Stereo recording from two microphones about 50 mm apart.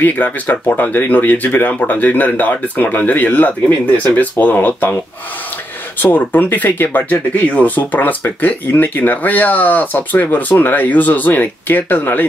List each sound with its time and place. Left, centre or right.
0.0 s speech: left
5.9 s speech: left